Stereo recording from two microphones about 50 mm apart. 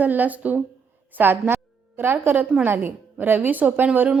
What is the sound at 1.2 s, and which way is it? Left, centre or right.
A woman's voice, right.